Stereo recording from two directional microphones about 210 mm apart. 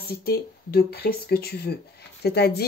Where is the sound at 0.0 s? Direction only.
50° left (ahead or behind).